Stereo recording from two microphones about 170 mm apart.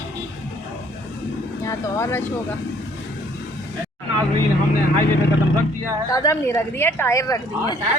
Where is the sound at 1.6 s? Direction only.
15° left (ahead or behind).